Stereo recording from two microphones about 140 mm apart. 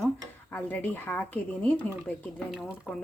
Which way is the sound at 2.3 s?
Centre (ahead or behind).